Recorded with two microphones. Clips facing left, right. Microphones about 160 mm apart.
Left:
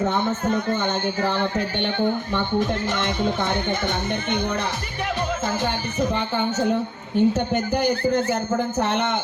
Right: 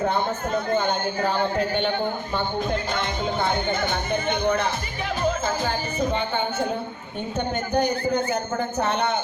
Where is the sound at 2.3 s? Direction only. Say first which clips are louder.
Left 3 dB; 75° left (ahead or behind).